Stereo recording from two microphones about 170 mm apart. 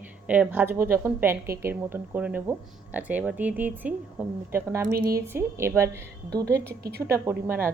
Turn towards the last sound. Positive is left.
turn(degrees=-10)  # may be behind; listen again after turning